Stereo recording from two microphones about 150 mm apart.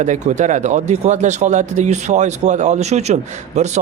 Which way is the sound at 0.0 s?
55° right (ahead or behind).